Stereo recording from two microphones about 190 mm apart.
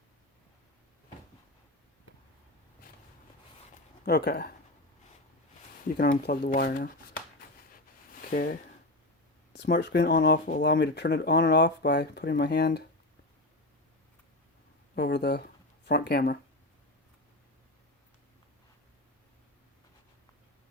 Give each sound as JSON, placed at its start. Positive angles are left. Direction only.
{"t": 4.0, "sound": "speech", "side_deg": 55}
{"t": 6.0, "sound": "speech", "side_deg": 50}
{"t": 8.2, "sound": "speech", "side_deg": 45}
{"t": 9.5, "sound": "speech", "side_deg": 65}
{"t": 14.9, "sound": "speech", "side_deg": 60}